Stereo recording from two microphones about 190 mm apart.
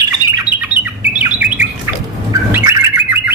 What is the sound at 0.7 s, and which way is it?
Bird, 10° right (ahead or behind).